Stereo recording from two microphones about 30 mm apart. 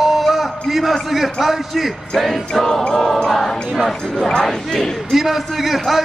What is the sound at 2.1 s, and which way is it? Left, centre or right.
Speech, centre.